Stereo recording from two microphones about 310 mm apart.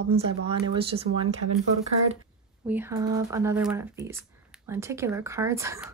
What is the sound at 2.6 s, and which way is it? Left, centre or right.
Speech, centre.